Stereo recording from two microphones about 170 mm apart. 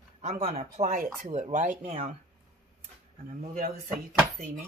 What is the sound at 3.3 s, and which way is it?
Speech, 45° right (ahead or behind).